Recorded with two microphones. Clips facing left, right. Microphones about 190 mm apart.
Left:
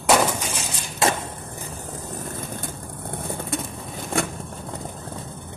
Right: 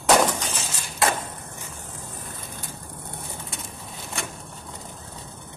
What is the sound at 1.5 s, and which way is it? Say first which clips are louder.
Vehicle: left 5 dB; 40° left (ahead or behind).